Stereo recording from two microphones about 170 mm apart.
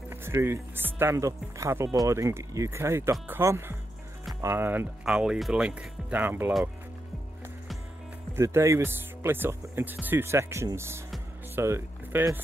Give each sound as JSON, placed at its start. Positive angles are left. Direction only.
{"t": 0.1, "sound": "speech", "side_deg": -15}
{"t": 8.4, "sound": "speech", "side_deg": -15}